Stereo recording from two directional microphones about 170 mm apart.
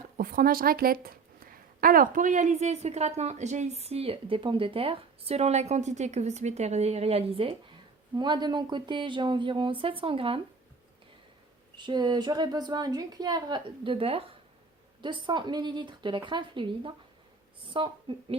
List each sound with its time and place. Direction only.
0.2 s a woman's voice: 60° right (ahead or behind); by 10.4 s 30° right (ahead or behind)
11.8 s a woman's voice: 25° right (ahead or behind)